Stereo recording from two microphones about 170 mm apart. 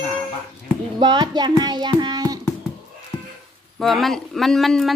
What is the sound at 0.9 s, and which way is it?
Child singing, 25° right (ahead or behind).